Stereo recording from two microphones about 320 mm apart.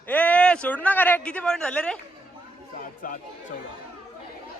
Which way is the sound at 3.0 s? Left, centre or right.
Left.